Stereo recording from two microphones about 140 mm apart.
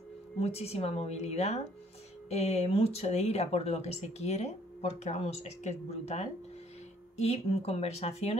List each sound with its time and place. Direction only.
0.4 s speech: 50° left (ahead or behind)